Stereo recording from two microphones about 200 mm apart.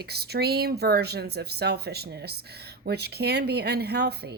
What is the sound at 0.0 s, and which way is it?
Speech, 55° right (ahead or behind).